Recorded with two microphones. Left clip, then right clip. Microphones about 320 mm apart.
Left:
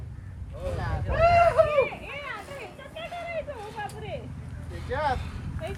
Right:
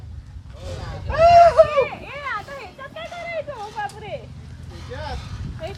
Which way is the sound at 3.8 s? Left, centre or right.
Right.